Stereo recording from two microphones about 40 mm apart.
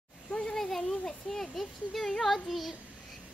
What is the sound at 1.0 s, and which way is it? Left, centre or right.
A child's voice, centre.